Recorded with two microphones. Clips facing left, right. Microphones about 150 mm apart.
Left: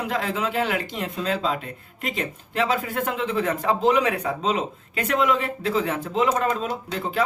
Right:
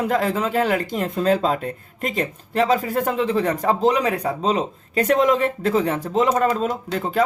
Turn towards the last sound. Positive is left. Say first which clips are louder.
# right 4 dB
turn(degrees=-45)  # may be behind; listen again after turning